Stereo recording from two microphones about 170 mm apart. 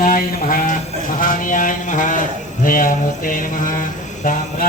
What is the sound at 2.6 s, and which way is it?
Mantra, 55° left (ahead or behind).